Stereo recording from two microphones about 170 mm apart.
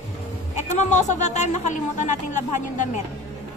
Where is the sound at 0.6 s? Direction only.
45° left (ahead or behind).